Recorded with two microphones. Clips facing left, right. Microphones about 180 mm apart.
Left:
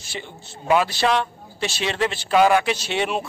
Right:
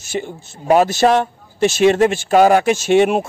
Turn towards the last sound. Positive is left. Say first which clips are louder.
# right 11 dB
turn(degrees=-50)  # may be behind; listen again after turning